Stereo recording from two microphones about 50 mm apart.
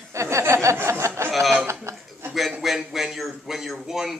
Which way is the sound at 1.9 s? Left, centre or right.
Right.